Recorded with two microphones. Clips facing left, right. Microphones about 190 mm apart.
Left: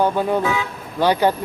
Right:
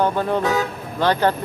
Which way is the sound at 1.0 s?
10° left (ahead or behind).